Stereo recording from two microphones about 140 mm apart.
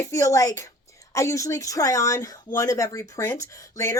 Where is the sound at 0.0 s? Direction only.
20° left (ahead or behind).